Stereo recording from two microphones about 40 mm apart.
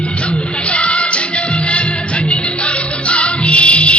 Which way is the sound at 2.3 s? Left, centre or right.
Left.